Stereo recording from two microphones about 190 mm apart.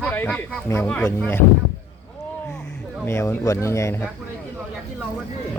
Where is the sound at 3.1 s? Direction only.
15° left (ahead or behind).